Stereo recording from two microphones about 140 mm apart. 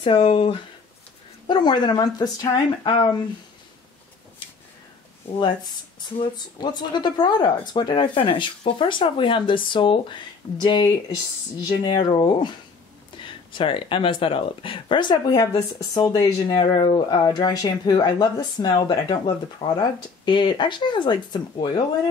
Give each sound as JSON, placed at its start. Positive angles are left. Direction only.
{"t": 0.0, "sound": "speech", "side_deg": 40}
{"t": 6.1, "sound": "speech", "side_deg": 35}